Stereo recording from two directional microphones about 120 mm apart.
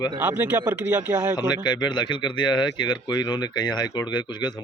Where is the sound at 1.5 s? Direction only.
35° left (ahead or behind).